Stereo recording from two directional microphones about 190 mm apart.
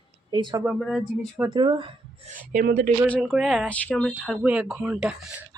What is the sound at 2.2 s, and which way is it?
Speech, 40° right (ahead or behind).